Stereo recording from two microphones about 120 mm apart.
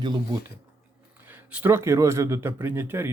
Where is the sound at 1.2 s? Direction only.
15° right (ahead or behind).